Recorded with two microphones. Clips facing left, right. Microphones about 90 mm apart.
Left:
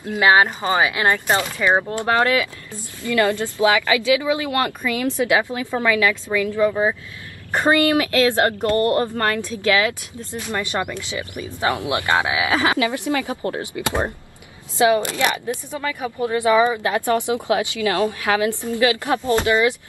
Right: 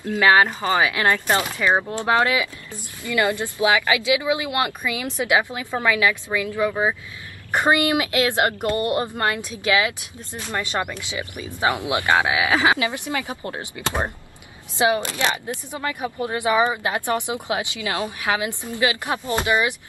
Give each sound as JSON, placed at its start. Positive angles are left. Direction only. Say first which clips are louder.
{"t": 0.0, "sound": "speech", "louder": "left 1 dB", "side_deg": 20}
{"t": 1.6, "sound": "speech", "louder": "left 2 dB", "side_deg": 5}
{"t": 2.0, "sound": "speech", "louder": "left 1 dB", "side_deg": -15}
{"t": 14.8, "sound": "speech", "louder": "left 3 dB", "side_deg": -25}